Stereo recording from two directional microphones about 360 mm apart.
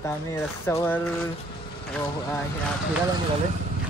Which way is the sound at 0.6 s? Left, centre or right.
Centre.